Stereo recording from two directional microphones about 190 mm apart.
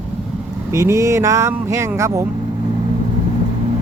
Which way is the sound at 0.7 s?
15° right (ahead or behind).